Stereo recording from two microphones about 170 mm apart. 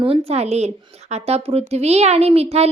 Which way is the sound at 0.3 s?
40° right (ahead or behind).